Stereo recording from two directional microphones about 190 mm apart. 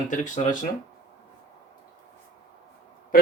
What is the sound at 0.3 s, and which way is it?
Speech, 40° left (ahead or behind).